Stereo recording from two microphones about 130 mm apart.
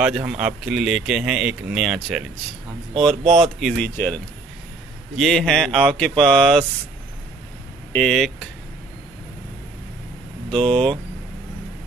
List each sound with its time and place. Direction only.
0.0 s speech: 10° right (ahead or behind)
3.8 s speech: 10° left (ahead or behind)
5.1 s speech: centre (ahead or behind)
7.9 s speech: 5° left (ahead or behind)
10.6 s speech: 45° right (ahead or behind)